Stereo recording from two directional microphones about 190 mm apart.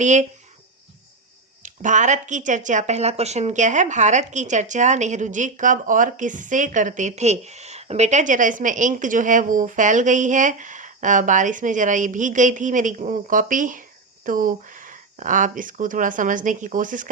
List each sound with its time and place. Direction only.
0.0 s speech: 40° right (ahead or behind)
1.6 s speech: 40° right (ahead or behind)